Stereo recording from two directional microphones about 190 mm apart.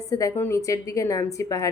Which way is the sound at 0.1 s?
15° left (ahead or behind).